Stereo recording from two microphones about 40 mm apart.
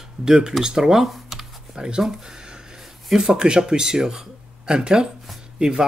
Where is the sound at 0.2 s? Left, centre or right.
Centre.